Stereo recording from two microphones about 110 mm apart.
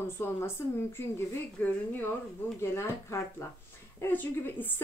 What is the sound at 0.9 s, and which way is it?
A woman's voice, 20° left (ahead or behind).